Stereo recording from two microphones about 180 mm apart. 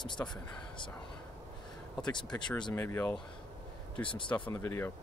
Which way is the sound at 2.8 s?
15° left (ahead or behind).